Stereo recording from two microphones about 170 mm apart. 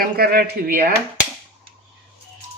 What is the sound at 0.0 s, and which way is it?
Speech, 65° right (ahead or behind).